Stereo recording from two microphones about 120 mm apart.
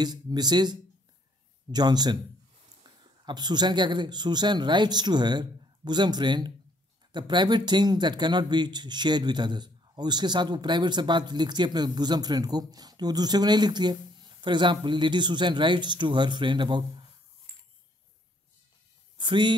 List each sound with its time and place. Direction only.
0.0 s speech: 35° right (ahead or behind)
3.3 s speech: 35° right (ahead or behind)
19.1 s speech: 40° right (ahead or behind)